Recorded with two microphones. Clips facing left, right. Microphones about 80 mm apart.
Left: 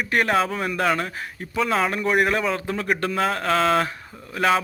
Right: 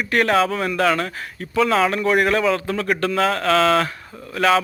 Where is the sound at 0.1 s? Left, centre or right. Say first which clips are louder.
Right 4 dB; centre.